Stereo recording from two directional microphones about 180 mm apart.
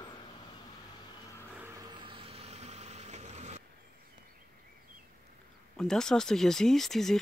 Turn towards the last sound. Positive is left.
turn(degrees=0)  # may be behind; listen again after turning